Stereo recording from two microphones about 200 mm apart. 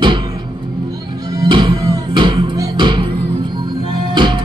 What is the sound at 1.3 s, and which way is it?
Music, 25° right (ahead or behind).